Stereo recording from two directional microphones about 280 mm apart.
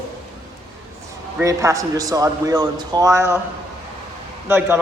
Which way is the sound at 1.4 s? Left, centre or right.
Centre.